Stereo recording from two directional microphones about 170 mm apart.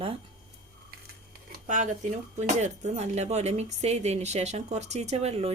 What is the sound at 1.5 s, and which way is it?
Speech, 50° right (ahead or behind).